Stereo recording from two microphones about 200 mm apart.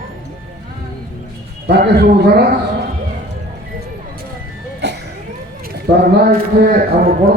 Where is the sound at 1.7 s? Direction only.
55° right (ahead or behind).